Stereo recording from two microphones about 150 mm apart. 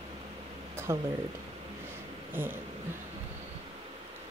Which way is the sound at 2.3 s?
15° right (ahead or behind).